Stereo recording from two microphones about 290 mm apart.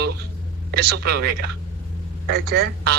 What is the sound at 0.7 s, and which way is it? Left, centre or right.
Speech, right.